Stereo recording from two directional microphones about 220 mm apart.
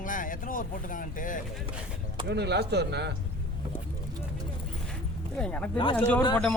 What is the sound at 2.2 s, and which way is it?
Speech, 50° right (ahead or behind).